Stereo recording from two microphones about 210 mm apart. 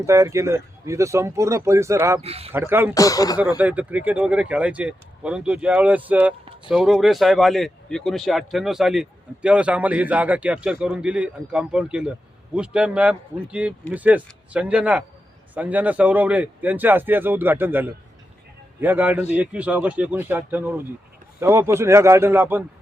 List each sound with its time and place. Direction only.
0.0 s speech: 15° right (ahead or behind)
2.2 s speech: 30° right (ahead or behind)
2.5 s speech: 10° right (ahead or behind)
2.9 s speech: 15° left (ahead or behind)
3.6 s speech: 5° right (ahead or behind)